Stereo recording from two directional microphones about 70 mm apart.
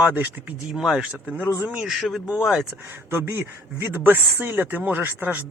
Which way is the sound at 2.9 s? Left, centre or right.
Right.